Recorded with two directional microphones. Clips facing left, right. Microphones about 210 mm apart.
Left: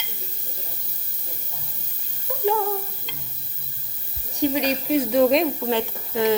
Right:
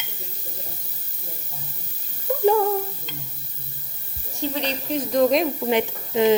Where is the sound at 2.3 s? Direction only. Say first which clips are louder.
Right 7 dB; 50° right (ahead or behind).